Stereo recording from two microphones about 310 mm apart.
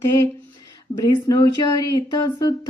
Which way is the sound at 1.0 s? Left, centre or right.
Centre.